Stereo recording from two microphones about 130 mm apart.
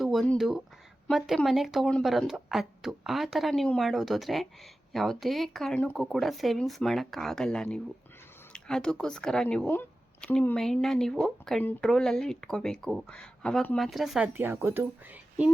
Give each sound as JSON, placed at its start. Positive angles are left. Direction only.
{"t": 0.0, "sound": "a sound", "side_deg": 0}
{"t": 0.3, "sound": "speech", "side_deg": 0}
{"t": 14.3, "sound": "speech", "side_deg": -15}